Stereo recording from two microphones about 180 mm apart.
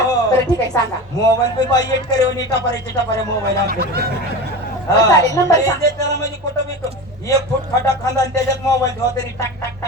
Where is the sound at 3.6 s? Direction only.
60° right (ahead or behind).